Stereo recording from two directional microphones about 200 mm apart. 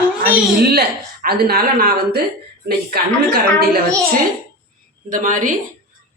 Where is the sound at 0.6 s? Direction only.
55° right (ahead or behind).